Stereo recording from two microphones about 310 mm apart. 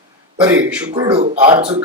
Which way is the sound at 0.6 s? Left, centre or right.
Centre.